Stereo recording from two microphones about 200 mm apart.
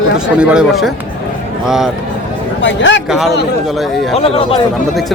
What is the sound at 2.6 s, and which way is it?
Speech, 65° left (ahead or behind).